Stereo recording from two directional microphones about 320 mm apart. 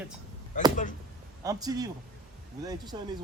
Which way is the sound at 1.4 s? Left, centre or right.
Centre.